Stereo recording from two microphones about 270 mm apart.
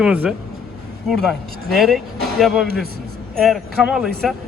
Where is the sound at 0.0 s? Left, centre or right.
Centre.